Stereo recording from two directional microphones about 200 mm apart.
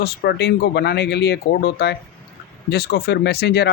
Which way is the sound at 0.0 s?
55° left (ahead or behind).